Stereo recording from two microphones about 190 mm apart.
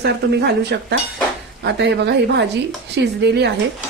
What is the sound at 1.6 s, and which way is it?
A woman's voice, 65° right (ahead or behind).